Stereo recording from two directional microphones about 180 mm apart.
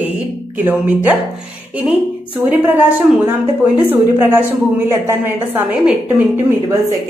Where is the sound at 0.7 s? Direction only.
10° right (ahead or behind).